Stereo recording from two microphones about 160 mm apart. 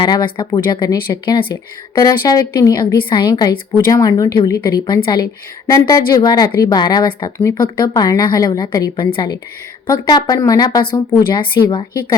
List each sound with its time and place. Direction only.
0.0 s a woman's voice: 25° left (ahead or behind)